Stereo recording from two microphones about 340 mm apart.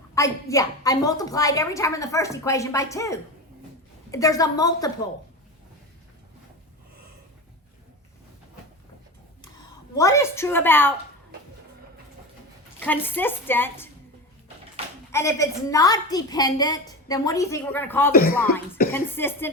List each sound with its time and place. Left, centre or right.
0.1 s a woman's voice: centre
9.9 s a woman's voice: centre
12.8 s a woman's voice: centre
15.1 s a woman's voice: centre
18.1 s speech: left
18.9 s a woman's voice: centre